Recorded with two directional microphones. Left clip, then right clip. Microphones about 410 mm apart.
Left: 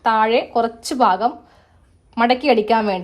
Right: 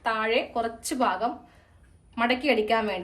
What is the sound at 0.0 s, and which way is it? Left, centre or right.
A woman's voice, centre.